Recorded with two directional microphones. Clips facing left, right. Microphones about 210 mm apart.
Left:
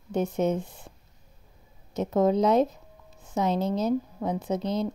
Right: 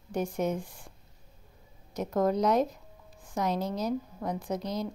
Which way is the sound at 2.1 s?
25° left (ahead or behind).